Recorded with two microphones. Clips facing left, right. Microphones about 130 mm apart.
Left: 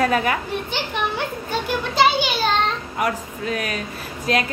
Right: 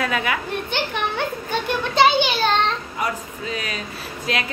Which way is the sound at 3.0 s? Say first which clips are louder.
Left 4 dB; 55° left (ahead or behind).